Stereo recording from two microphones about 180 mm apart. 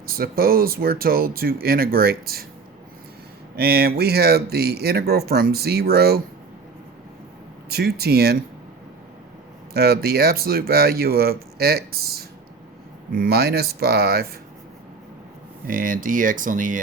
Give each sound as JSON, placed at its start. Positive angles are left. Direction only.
{"t": 0.0, "sound": "speech", "side_deg": -55}
{"t": 3.5, "sound": "speech", "side_deg": -60}
{"t": 7.7, "sound": "speech", "side_deg": -60}
{"t": 9.7, "sound": "speech", "side_deg": -60}
{"t": 15.6, "sound": "speech", "side_deg": -50}